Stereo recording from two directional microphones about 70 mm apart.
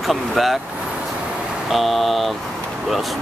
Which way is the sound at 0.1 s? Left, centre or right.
Centre.